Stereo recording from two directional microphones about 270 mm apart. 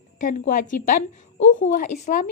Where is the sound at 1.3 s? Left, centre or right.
Left.